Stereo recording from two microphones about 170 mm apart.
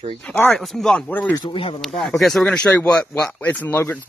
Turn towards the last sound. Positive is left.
turn(degrees=10)  # may be behind; listen again after turning